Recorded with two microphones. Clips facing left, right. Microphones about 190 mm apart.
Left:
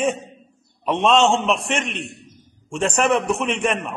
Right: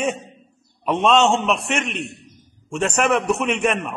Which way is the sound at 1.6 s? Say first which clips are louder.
Even; 30° left (ahead or behind).